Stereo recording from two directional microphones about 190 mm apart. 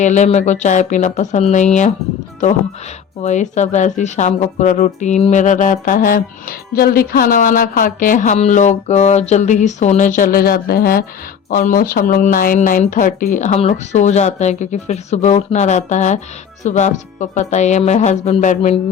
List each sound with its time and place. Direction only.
0.0 s speech: 40° left (ahead or behind)
3.2 s speech: 40° left (ahead or behind)